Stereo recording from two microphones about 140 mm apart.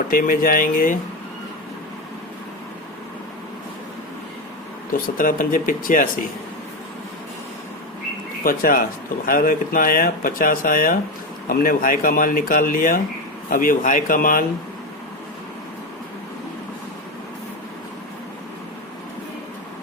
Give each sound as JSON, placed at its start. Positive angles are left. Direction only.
{"t": 0.1, "sound": "speech", "side_deg": 90}
{"t": 5.0, "sound": "speech", "side_deg": 75}
{"t": 8.4, "sound": "speech", "side_deg": 90}
{"t": 11.4, "sound": "speech", "side_deg": 85}